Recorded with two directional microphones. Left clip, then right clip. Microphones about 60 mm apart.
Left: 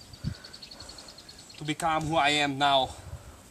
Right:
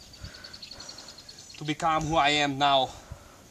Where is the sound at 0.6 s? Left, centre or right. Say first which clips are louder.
Right 3 dB; right.